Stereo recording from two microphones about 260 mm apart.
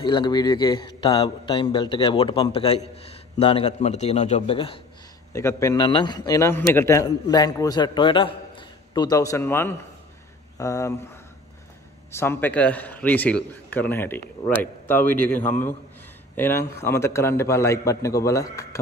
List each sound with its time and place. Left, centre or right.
0.0 s a man's voice: centre
12.1 s a man's voice: centre